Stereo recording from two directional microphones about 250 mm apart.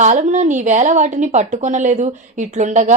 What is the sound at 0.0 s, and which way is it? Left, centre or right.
A woman's voice, right.